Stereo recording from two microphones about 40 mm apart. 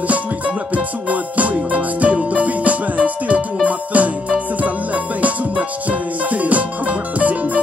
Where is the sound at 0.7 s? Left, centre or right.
Right.